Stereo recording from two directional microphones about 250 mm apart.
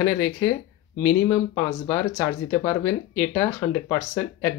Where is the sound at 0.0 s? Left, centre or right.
Centre.